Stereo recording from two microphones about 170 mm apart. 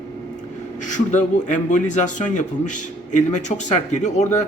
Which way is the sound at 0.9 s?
45° left (ahead or behind).